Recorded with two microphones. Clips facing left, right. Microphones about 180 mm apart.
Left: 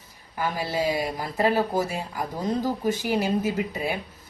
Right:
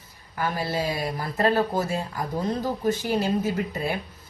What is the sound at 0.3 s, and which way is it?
A woman's voice, 15° left (ahead or behind).